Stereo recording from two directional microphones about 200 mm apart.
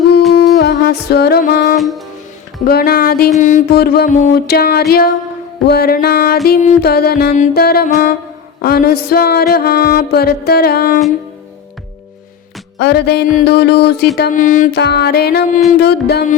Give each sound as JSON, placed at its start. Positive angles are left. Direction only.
{"t": 0.6, "sound": "music", "side_deg": 55}
{"t": 1.7, "sound": "music", "side_deg": 0}
{"t": 2.6, "sound": "music", "side_deg": 50}
{"t": 4.5, "sound": "music", "side_deg": 50}
{"t": 12.8, "sound": "music", "side_deg": 55}
{"t": 14.2, "sound": "speech", "side_deg": 40}
{"t": 14.8, "sound": "music", "side_deg": 55}